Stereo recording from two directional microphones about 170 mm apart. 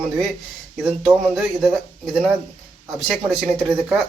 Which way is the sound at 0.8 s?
Centre (ahead or behind).